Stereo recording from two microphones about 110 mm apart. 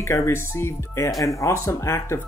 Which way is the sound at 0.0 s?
25° left (ahead or behind).